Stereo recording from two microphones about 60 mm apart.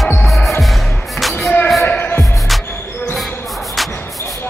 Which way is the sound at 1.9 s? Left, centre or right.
Left.